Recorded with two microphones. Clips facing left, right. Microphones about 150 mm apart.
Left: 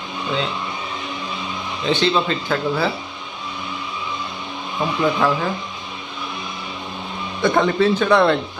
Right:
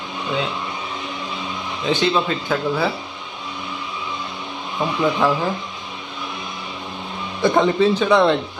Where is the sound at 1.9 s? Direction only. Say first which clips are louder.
Even; 5° right (ahead or behind).